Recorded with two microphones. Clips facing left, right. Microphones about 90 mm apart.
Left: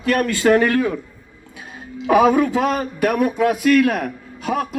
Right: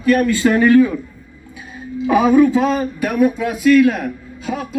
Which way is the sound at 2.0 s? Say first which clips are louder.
Right 2 dB; 65° left (ahead or behind).